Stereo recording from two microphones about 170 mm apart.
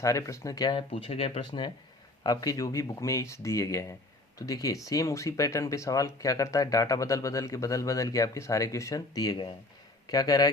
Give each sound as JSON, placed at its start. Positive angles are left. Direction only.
{"t": 0.0, "sound": "speech", "side_deg": 20}